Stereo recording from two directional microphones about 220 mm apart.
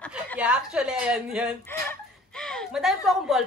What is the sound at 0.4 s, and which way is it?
A woman's voice, 5° right (ahead or behind).